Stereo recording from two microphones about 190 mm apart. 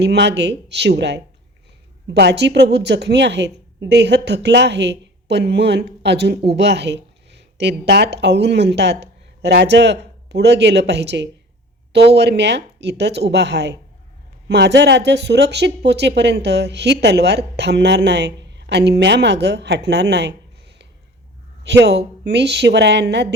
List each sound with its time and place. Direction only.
0.0 s speech: 65° right (ahead or behind)